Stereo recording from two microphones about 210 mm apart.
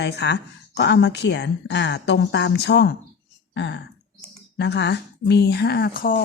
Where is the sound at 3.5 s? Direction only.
55° left (ahead or behind).